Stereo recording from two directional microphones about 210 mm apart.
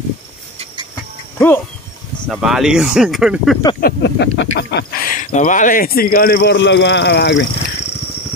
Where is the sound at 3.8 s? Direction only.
55° left (ahead or behind).